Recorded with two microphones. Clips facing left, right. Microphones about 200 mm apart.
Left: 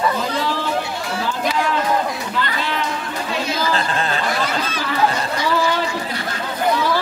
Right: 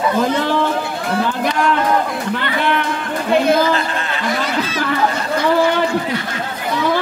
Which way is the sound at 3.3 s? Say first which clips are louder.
Right 11 dB; 55° right (ahead or behind).